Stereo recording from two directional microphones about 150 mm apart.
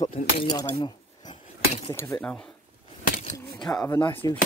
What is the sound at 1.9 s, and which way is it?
Speech, 20° left (ahead or behind).